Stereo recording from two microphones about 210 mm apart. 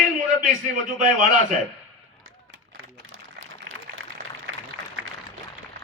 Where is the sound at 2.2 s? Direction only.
80° right.